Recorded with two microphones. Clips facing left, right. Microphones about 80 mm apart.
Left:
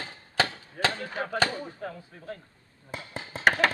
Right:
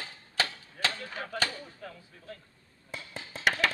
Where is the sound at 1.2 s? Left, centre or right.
Left.